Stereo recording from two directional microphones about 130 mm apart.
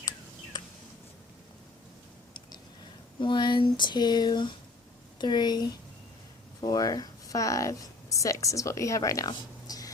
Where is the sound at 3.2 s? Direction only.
35° left (ahead or behind).